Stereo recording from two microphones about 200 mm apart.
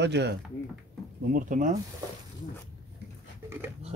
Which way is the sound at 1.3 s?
40° right (ahead or behind).